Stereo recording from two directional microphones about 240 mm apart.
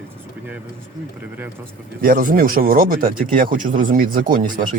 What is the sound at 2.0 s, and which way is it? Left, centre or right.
Speech, right.